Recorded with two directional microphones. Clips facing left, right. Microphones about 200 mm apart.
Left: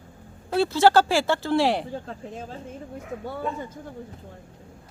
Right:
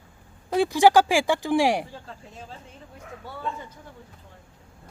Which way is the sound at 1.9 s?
50° left (ahead or behind).